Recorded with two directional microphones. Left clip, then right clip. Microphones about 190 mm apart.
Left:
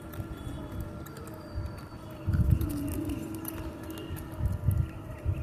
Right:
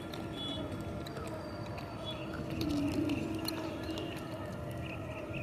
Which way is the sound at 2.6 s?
25° left (ahead or behind).